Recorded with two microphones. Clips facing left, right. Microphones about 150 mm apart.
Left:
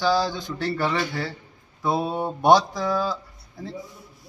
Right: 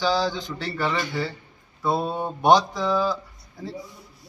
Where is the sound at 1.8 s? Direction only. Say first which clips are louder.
Even; 10° left (ahead or behind).